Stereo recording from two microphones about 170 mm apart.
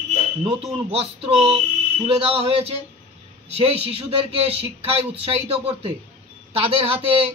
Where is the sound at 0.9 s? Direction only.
35° right (ahead or behind).